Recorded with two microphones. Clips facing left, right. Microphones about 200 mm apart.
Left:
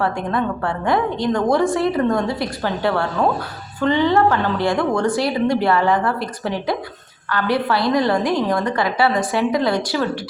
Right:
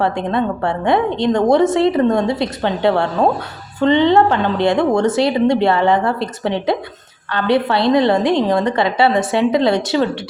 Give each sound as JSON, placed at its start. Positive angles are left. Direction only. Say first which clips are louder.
{"t": 0.0, "sound": "a woman's voice", "louder": "right 3 dB", "side_deg": -25}